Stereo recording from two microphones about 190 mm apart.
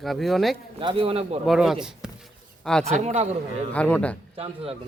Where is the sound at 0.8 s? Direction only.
25° right (ahead or behind).